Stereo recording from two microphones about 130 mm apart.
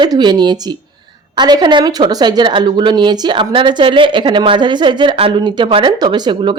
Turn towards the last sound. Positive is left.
turn(degrees=-35)  # may be behind; listen again after turning